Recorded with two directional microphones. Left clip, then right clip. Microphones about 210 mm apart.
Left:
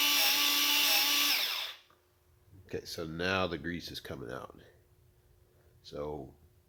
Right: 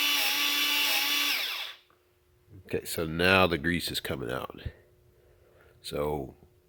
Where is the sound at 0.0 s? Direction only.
10° right (ahead or behind).